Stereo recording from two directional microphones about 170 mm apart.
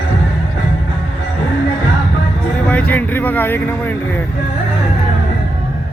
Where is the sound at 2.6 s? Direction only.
10° left (ahead or behind).